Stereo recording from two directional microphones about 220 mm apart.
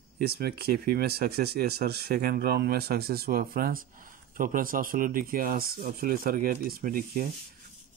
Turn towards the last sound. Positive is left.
turn(degrees=-40)  # may be behind; listen again after turning